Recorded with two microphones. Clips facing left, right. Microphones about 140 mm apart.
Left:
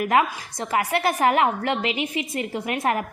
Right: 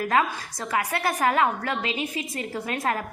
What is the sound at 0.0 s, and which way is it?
A woman's voice, 20° left (ahead or behind).